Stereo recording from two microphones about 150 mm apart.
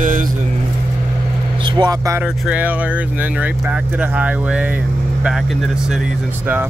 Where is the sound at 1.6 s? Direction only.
25° right (ahead or behind).